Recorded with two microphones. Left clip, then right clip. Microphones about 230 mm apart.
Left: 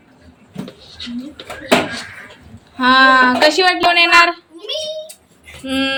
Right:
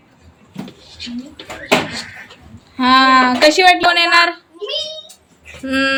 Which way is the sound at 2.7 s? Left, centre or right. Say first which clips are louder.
Even; right.